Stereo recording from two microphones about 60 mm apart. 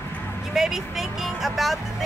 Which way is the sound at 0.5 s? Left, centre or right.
Centre.